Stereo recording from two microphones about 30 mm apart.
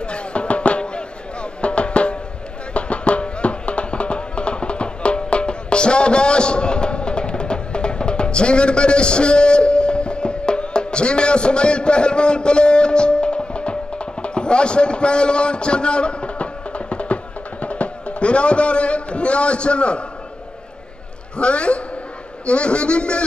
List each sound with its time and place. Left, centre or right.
0.0 s music: left
21.4 s a man's voice: left